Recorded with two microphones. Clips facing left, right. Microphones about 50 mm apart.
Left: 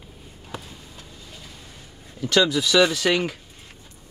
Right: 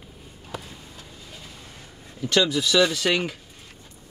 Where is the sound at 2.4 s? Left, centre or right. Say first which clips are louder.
Left 2 dB; left.